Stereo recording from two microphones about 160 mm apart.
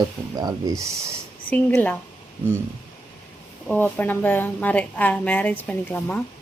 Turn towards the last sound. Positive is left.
turn(degrees=10)  # may be behind; listen again after turning